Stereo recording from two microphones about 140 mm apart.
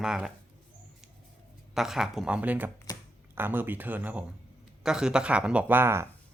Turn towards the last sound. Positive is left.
turn(degrees=-15)  # may be behind; listen again after turning